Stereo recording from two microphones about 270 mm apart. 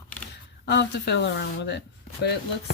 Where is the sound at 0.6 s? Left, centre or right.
Left.